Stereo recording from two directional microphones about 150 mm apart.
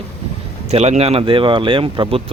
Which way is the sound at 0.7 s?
45° right (ahead or behind).